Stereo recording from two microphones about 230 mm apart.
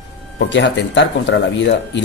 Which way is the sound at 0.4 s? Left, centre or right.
Left.